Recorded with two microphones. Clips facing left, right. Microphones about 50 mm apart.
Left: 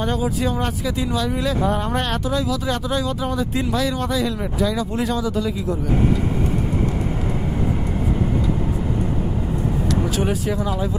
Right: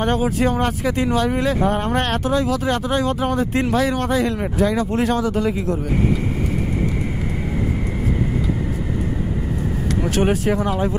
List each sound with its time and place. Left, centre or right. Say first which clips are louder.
0.0 s speech: right 3 dB; right
10.0 s speech: right 3 dB; right